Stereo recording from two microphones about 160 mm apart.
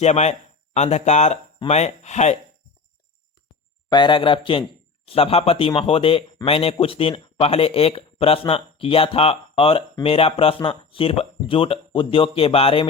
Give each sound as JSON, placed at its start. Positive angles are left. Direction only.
{"t": 0.0, "sound": "speech", "side_deg": 45}
{"t": 3.8, "sound": "speech", "side_deg": 30}